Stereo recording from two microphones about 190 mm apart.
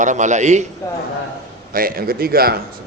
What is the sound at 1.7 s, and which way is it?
Speech, 50° right (ahead or behind).